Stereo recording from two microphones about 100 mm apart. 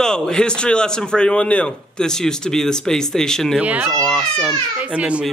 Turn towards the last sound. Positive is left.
turn(degrees=-10)  # may be behind; listen again after turning